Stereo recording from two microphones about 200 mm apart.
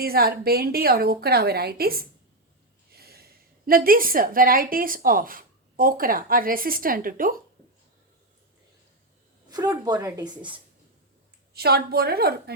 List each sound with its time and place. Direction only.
0.0 s a woman's voice: 50° right (ahead or behind)
9.5 s a woman's voice: 20° right (ahead or behind)
11.5 s a woman's voice: 50° right (ahead or behind)